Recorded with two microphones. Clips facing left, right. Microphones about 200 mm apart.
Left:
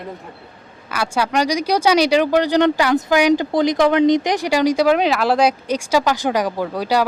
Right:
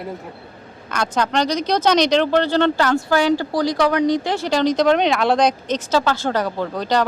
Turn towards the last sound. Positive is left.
turn(degrees=10)  # may be behind; listen again after turning